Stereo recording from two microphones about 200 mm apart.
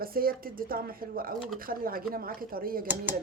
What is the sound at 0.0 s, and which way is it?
Speech, 45° right (ahead or behind).